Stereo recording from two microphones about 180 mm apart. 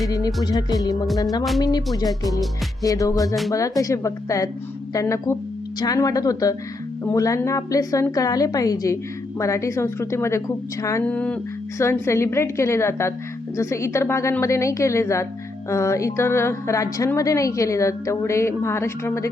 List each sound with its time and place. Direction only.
0.4 s a woman's voice: 20° left (ahead or behind)
2.8 s a woman's voice: 20° left (ahead or behind)